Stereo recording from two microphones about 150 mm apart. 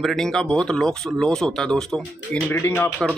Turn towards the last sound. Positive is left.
turn(degrees=15)  # may be behind; listen again after turning